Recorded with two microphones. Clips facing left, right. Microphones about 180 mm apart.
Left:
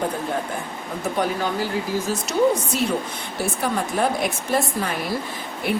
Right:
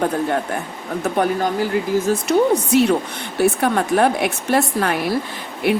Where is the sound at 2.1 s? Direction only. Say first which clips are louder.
Right 1 dB; 65° right (ahead or behind).